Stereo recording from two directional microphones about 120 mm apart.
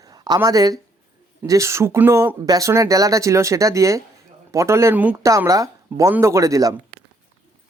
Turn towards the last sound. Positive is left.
turn(degrees=-30)  # may be behind; listen again after turning